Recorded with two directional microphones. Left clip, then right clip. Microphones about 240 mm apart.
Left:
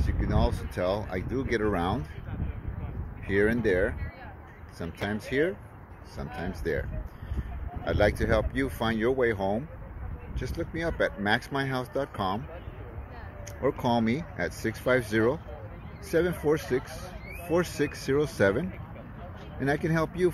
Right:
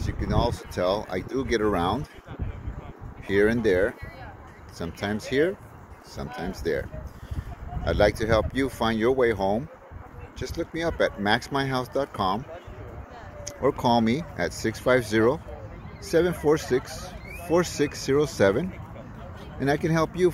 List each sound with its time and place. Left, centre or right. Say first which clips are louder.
0.0 s speech: right 3 dB; centre
3.3 s speech: right 4 dB; centre
13.5 s speech: right 5 dB; centre